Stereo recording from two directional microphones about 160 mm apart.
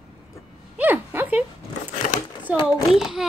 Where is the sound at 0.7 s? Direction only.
10° right (ahead or behind).